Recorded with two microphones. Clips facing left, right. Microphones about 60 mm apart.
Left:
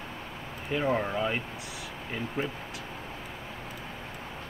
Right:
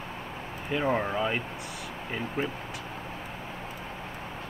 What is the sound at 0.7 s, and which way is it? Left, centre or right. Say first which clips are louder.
Speech: right 1 dB; centre.